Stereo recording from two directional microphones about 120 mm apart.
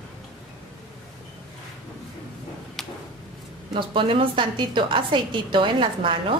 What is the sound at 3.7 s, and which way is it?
A woman's voice, 45° right (ahead or behind).